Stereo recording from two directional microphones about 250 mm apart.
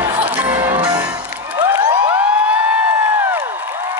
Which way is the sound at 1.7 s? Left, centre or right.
Centre.